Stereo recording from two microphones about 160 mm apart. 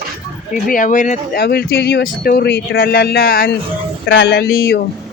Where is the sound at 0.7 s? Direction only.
55° left (ahead or behind).